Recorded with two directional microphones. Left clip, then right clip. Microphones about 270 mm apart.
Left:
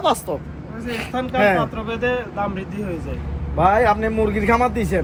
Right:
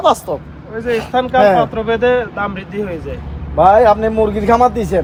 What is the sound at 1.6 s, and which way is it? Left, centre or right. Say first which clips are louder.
Speech: right 9 dB; right.